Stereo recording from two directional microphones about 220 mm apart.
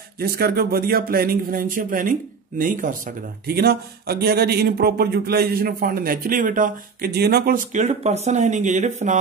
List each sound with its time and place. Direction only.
0.2 s speech: 45° right (ahead or behind)